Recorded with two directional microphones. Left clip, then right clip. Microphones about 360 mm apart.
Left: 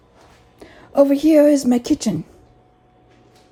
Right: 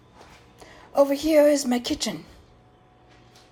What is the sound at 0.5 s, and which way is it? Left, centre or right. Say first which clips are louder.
A woman's voice: left 5 dB; centre.